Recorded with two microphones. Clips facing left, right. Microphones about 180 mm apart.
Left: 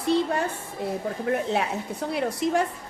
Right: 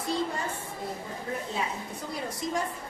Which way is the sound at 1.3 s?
70° left (ahead or behind).